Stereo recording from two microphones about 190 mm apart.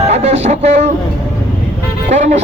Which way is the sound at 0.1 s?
35° right (ahead or behind).